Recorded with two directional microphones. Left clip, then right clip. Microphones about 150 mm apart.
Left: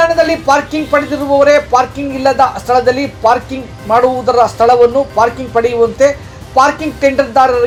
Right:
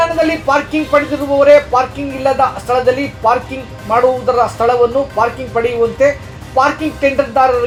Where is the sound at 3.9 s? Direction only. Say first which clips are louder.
Left 2 dB; 45° left (ahead or behind).